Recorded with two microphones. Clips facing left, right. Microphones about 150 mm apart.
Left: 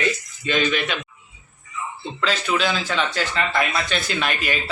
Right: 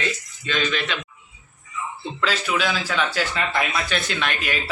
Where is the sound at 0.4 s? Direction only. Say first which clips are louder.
Left 3 dB; 15° left (ahead or behind).